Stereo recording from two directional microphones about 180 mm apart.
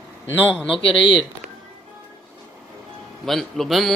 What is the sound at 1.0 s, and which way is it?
Speech, 25° left (ahead or behind).